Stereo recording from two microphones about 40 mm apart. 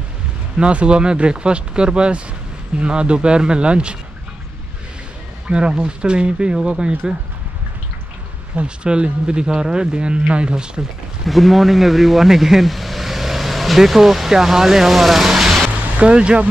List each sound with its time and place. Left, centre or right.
0.6 s speech: right
5.5 s speech: right
8.5 s speech: right
11.2 s speech: centre
16.0 s speech: right